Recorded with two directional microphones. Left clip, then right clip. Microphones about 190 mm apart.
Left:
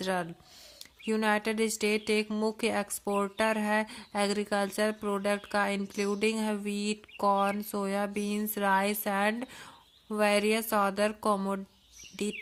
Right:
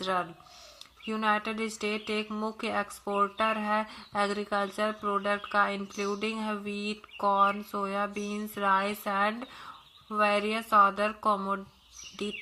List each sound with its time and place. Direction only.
0.0 s speech: 40° left (ahead or behind)
1.0 s speech: 50° left (ahead or behind)